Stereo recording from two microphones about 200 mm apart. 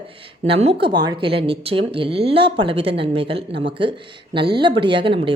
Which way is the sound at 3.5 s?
60° right (ahead or behind).